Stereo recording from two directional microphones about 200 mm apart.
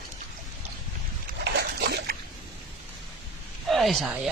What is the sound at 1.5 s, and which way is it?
Dog, 55° right (ahead or behind).